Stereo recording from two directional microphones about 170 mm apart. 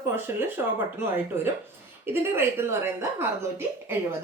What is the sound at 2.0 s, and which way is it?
Speech, 15° right (ahead or behind).